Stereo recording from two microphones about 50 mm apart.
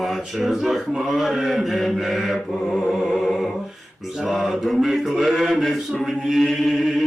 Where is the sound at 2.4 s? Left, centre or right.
Centre.